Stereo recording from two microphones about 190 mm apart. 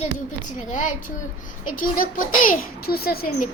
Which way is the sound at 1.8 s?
45° left (ahead or behind).